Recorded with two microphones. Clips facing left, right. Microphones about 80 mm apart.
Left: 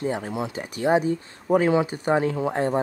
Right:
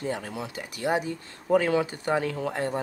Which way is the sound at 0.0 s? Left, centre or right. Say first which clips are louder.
Left 5 dB; left.